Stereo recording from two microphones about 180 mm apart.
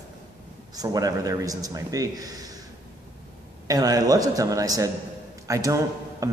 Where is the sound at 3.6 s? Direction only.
20° right (ahead or behind).